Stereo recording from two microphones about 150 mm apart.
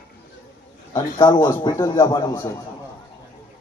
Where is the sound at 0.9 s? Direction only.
25° left (ahead or behind).